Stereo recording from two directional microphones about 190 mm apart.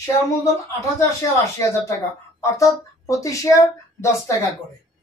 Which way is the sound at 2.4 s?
15° left (ahead or behind).